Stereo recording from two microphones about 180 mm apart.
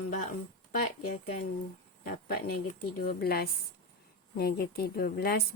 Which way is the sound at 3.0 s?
60° left (ahead or behind).